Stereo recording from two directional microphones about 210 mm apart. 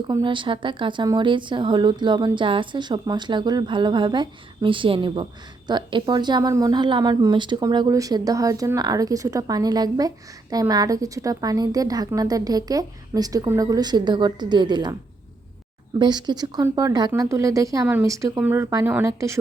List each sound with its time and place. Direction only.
0.1 s a woman's voice: 20° right (ahead or behind)
16.0 s a woman's voice: 20° right (ahead or behind)